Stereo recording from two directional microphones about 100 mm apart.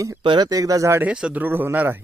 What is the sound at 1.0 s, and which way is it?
Speech, 10° right (ahead or behind).